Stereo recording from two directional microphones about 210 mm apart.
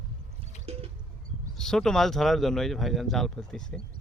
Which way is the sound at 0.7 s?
30° right (ahead or behind).